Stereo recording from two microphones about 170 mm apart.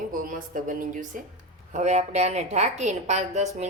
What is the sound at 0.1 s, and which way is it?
A woman's voice, 50° right (ahead or behind).